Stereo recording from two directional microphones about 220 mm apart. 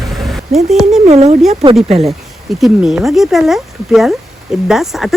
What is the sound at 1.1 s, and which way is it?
Speech, 30° right (ahead or behind).